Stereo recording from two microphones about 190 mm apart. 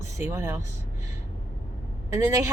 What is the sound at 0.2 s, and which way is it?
Speech, 15° right (ahead or behind).